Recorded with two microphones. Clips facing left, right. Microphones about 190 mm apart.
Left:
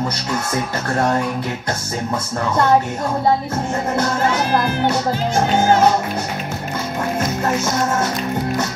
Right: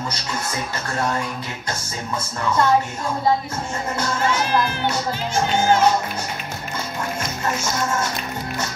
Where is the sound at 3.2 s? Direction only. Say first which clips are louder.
Left 2 dB; 45° left (ahead or behind).